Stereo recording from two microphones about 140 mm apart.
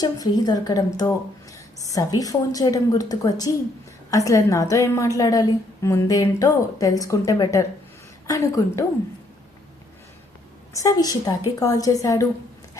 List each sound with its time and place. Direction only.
0.0 s a woman's voice: 25° left (ahead or behind)
10.8 s a woman's voice: 25° left (ahead or behind)